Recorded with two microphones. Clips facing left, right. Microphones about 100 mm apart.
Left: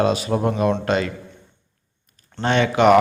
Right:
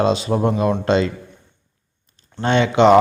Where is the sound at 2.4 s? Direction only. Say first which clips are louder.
Right 2 dB; 25° right (ahead or behind).